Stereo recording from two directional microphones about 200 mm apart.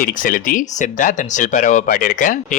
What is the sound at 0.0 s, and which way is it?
Speech, 45° left (ahead or behind).